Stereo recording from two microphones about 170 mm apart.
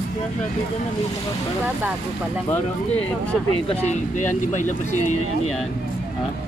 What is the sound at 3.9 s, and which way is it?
Speech, 45° left (ahead or behind).